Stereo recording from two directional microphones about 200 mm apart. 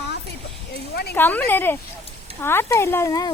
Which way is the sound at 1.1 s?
10° left (ahead or behind).